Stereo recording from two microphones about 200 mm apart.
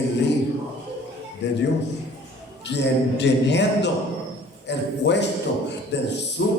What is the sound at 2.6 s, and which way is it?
A man's voice, 60° left (ahead or behind).